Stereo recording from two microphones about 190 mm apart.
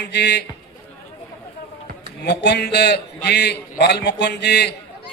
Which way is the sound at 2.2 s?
60° left (ahead or behind).